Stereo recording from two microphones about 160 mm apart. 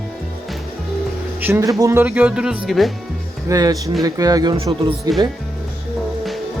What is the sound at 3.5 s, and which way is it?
Speech, 20° right (ahead or behind).